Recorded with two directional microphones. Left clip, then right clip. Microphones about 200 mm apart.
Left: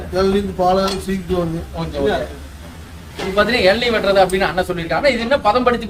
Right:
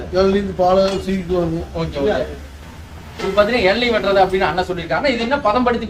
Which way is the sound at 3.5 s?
Centre (ahead or behind).